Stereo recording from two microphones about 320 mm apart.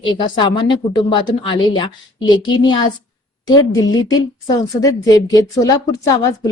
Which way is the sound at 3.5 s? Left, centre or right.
Centre.